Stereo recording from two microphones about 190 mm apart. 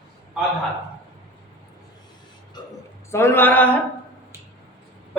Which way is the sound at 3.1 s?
15° left (ahead or behind).